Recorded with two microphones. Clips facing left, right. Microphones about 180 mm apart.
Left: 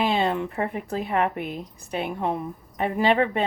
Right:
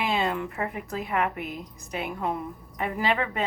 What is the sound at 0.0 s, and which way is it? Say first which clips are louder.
Speech: left 4 dB; 30° left (ahead or behind).